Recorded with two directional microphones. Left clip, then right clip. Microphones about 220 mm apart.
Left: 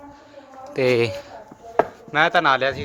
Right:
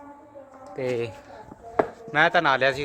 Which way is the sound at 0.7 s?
30° left (ahead or behind).